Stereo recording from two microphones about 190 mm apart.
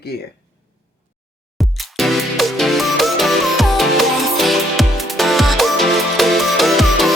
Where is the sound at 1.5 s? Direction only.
Centre (ahead or behind).